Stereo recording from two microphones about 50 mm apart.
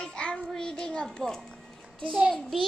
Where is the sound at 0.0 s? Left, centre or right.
Centre.